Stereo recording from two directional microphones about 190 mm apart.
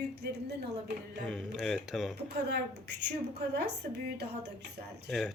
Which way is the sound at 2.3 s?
60° right (ahead or behind).